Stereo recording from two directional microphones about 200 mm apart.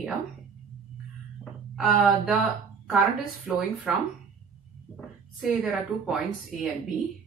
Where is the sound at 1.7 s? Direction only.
Centre (ahead or behind).